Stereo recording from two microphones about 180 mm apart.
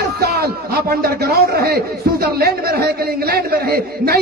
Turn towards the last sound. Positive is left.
turn(degrees=-60)  # may be behind; listen again after turning